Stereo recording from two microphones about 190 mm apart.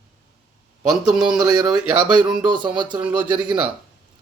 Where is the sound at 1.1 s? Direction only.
5° right (ahead or behind).